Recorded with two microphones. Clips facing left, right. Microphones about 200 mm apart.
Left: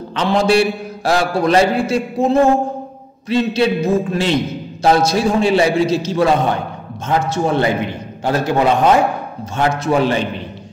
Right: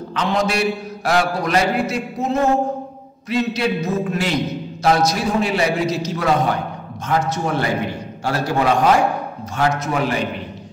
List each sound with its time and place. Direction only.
0.1 s a man's voice: 30° left (ahead or behind)